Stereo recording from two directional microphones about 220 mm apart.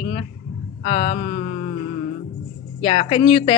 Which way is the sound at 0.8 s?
25° left (ahead or behind).